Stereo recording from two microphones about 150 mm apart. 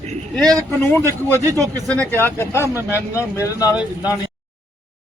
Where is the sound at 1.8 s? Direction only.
10° left (ahead or behind).